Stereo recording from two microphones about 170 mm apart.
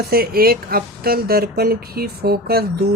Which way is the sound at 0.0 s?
65° right (ahead or behind).